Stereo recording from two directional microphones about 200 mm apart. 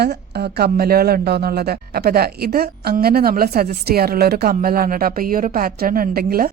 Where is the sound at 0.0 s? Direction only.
55° right (ahead or behind).